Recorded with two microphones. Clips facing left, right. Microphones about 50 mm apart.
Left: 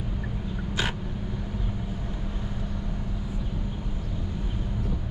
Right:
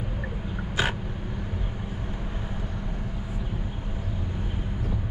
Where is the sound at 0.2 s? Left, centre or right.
Right.